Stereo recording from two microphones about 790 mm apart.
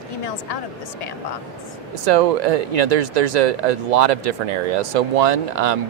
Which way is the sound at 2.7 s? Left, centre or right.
Right.